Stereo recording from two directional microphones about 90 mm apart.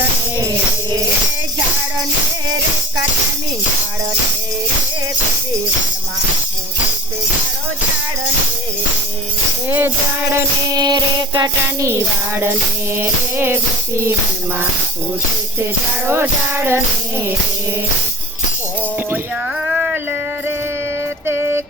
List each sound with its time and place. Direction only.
9.6 s music: 25° right (ahead or behind)
10.7 s music: 50° right (ahead or behind)
11.8 s music: 30° right (ahead or behind)
16.2 s music: 25° right (ahead or behind)
21.2 s music: 25° right (ahead or behind)